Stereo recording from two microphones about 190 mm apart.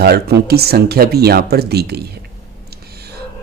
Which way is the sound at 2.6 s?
55° right (ahead or behind).